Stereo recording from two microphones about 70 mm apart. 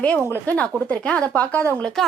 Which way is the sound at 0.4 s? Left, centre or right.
Left.